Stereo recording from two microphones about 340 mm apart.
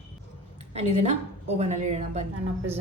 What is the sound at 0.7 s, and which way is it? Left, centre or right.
A woman's voice, centre.